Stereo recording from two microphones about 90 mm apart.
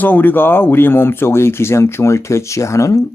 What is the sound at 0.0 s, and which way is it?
Speech, 20° left (ahead or behind).